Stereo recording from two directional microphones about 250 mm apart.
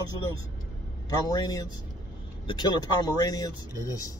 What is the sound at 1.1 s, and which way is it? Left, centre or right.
A man's voice, centre.